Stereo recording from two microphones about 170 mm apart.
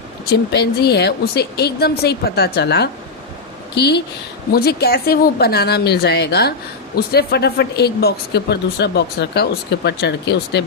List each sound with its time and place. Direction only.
0.3 s speech: 75° left (ahead or behind)
4.5 s speech: 65° left (ahead or behind); by 10.6 s 85° left